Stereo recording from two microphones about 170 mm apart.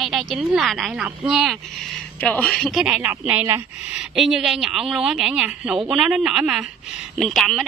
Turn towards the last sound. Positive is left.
turn(degrees=0)  # may be behind; listen again after turning